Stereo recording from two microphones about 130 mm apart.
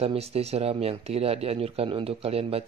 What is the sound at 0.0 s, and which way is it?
Speech, 50° right (ahead or behind).